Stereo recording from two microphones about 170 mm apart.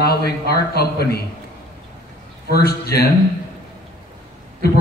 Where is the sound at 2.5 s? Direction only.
70° left (ahead or behind).